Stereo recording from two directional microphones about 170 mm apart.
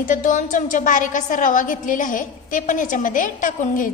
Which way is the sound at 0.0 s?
50° left (ahead or behind).